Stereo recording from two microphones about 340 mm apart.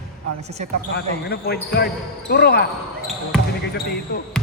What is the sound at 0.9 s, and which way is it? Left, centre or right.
Speech, left.